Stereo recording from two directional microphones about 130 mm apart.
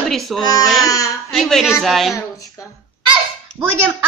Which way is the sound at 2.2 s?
25° left (ahead or behind).